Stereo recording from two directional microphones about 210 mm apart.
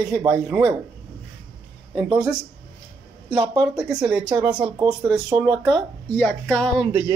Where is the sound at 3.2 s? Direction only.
25° right (ahead or behind).